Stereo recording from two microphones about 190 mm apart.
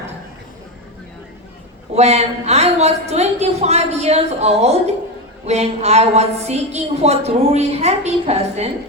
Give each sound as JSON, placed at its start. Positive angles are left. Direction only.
{"t": 2.0, "sound": "a woman's voice", "side_deg": -35}